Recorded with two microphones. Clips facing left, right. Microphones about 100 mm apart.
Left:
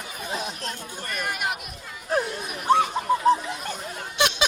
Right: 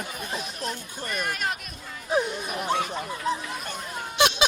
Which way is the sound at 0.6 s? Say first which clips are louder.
Right 1 dB; 15° right (ahead or behind).